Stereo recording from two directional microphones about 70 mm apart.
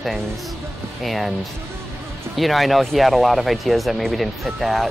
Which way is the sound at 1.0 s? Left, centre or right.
Centre.